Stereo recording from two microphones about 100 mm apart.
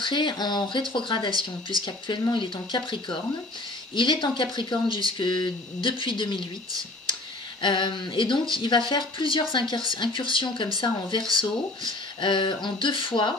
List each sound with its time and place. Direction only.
0.0 s speech: 50° left (ahead or behind)
1.3 s speech: 40° right (ahead or behind)
1.9 s speech: 50° left (ahead or behind)
7.6 s speech: 55° left (ahead or behind)